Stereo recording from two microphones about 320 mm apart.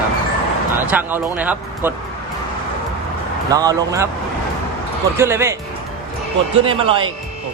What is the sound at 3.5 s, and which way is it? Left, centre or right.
Speech, centre.